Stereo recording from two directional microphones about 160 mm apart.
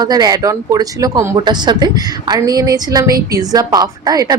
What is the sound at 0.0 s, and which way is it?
Speech, 25° right (ahead or behind).